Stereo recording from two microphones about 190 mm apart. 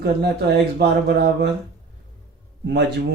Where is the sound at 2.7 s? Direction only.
60° right (ahead or behind).